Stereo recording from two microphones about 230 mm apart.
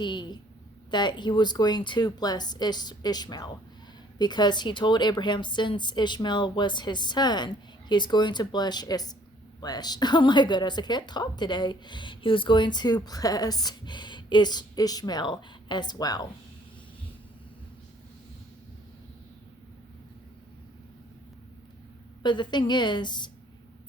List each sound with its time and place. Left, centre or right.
0.0 s a woman's voice: centre
22.2 s a woman's voice: centre